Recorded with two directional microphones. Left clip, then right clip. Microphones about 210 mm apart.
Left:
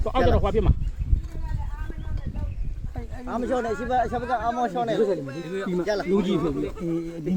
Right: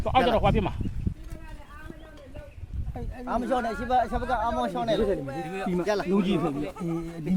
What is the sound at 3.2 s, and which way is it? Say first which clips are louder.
Speech: left 1 dB; 55° right (ahead or behind).